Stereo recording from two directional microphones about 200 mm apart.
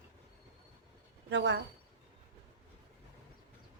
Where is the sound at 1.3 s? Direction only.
60° right (ahead or behind).